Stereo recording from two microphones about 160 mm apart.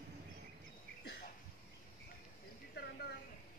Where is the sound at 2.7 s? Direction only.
90° left.